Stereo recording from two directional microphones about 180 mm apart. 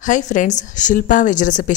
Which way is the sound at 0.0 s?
45° left (ahead or behind).